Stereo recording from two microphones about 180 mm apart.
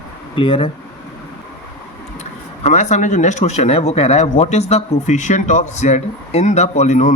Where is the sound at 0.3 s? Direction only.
30° left (ahead or behind).